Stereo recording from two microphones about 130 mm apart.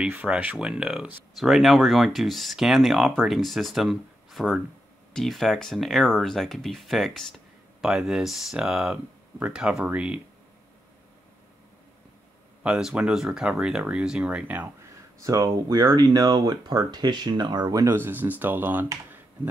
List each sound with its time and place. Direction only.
0.0 s speech: 10° right (ahead or behind)
12.6 s speech: 5° right (ahead or behind)
15.2 s speech: 25° right (ahead or behind)
17.9 s speech: 15° right (ahead or behind)